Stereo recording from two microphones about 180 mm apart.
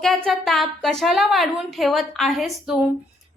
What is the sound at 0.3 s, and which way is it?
A woman's voice, centre (ahead or behind).